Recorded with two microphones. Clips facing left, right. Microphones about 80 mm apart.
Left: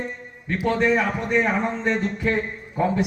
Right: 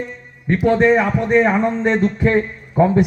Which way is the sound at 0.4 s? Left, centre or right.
Right.